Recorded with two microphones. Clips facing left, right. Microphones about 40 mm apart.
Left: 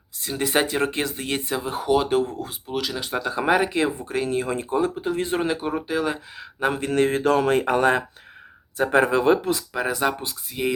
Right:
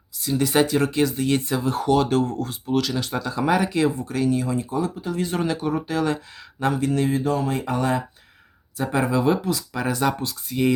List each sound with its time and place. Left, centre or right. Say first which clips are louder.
0.2 s speech: right 3 dB; left
1.5 s speech: left 1 dB; centre
3.2 s speech: left 2 dB; left
6.7 s speech: left 2 dB; left
9.7 s speech: right 2 dB; centre